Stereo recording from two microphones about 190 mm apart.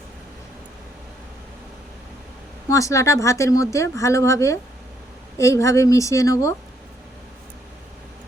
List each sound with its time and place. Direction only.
2.6 s speech: 15° left (ahead or behind)